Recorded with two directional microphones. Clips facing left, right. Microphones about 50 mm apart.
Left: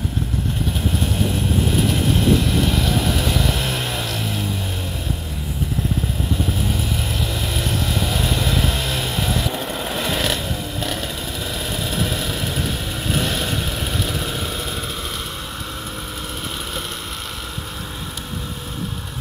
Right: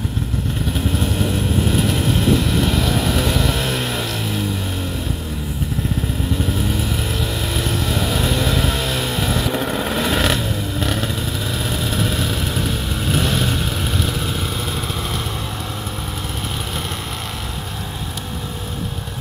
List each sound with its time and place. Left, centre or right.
8.1 s vehicle: centre